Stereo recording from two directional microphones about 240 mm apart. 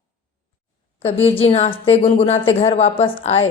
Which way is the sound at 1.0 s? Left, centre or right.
Left.